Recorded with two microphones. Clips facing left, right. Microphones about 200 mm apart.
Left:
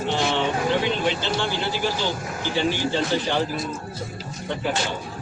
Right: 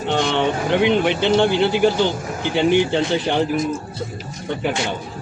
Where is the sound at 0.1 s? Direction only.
65° right (ahead or behind).